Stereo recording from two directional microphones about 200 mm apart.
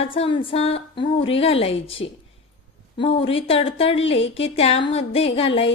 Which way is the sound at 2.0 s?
75° left (ahead or behind).